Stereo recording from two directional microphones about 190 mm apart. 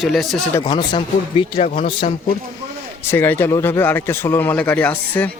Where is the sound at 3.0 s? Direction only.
10° left (ahead or behind).